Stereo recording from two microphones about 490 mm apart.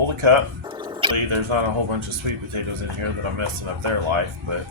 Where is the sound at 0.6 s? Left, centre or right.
Centre.